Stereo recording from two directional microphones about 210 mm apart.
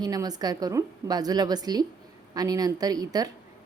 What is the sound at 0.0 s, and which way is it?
A woman's voice, 20° right (ahead or behind).